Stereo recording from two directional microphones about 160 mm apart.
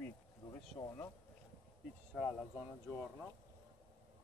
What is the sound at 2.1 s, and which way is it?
Speech, centre (ahead or behind).